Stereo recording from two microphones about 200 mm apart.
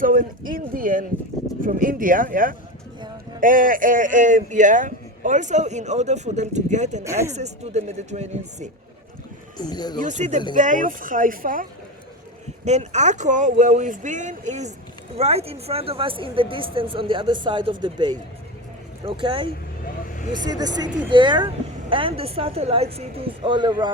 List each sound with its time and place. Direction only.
0.0 s a man's voice: 40° right (ahead or behind)
7.0 s speech: 15° right (ahead or behind)
7.3 s a man's voice: 35° right (ahead or behind)
9.6 s speech: 20° left (ahead or behind)
10.0 s a man's voice: 35° right (ahead or behind)